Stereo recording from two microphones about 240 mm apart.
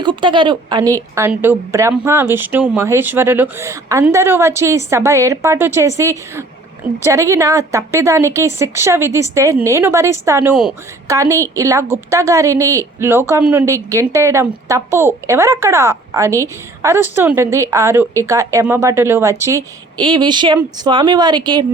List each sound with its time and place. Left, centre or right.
0.0 s speech: centre